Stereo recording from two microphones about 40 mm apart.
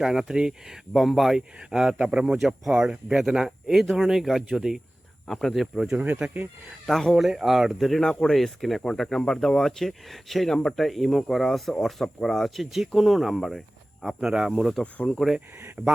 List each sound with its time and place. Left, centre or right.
0.0 s speech: centre
0.9 s speech: centre
2.0 s speech: centre
5.3 s speech: centre
5.5 s speech: centre
6.2 s speech: centre
6.8 s speech: centre
7.2 s speech: centre
7.9 s speech: centre
14.3 s speech: centre
15.0 s speech: centre
15.8 s speech: right